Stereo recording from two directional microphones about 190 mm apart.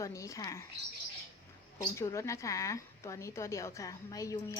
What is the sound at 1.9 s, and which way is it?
A woman's voice, 15° left (ahead or behind).